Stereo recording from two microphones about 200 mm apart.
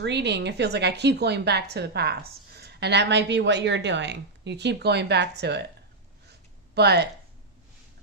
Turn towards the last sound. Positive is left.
turn(degrees=-55)  # may be behind; listen again after turning